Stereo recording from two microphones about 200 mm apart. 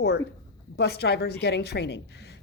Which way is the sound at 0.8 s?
55° left (ahead or behind).